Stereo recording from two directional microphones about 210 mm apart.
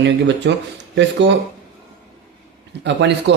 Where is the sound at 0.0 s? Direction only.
55° right (ahead or behind).